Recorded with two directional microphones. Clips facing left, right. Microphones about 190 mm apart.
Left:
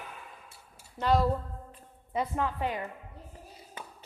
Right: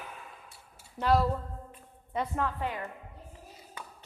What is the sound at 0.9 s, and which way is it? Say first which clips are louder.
Speech: even; 5° right (ahead or behind).